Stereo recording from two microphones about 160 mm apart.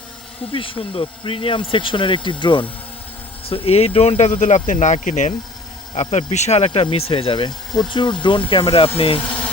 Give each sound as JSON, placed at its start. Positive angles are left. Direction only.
{"t": 0.5, "sound": "speech", "side_deg": 35}